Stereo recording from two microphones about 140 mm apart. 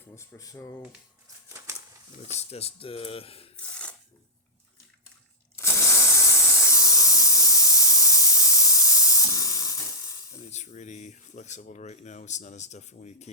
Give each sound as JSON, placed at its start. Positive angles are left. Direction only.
{"t": 0.2, "sound": "speech", "side_deg": 25}
{"t": 1.5, "sound": "a sound", "side_deg": -20}
{"t": 2.3, "sound": "speech", "side_deg": 45}
{"t": 5.5, "sound": "hiss", "side_deg": 20}
{"t": 10.5, "sound": "speech", "side_deg": 55}